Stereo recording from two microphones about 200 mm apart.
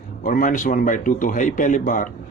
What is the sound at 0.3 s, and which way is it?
Speech, 40° left (ahead or behind).